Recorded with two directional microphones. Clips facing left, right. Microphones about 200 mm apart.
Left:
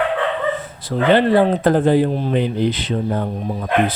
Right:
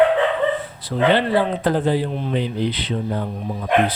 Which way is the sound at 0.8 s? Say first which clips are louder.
Left 3 dB; 45° left (ahead or behind).